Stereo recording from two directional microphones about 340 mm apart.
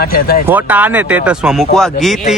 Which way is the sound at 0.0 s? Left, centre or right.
Left.